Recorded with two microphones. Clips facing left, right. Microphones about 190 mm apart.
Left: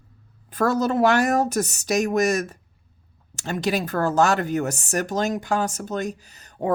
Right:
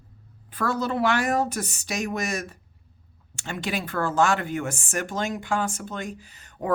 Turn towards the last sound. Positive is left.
turn(degrees=35)  # may be behind; listen again after turning